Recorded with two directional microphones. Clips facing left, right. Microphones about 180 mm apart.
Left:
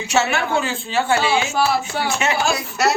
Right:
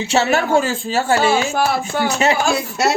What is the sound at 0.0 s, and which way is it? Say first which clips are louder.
Speech: right 3 dB; 30° right (ahead or behind).